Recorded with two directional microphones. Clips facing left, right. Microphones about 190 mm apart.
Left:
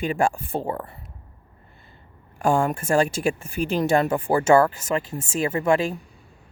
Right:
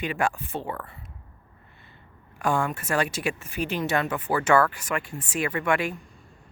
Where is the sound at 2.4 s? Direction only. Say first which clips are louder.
Left 5 dB; 30° left (ahead or behind).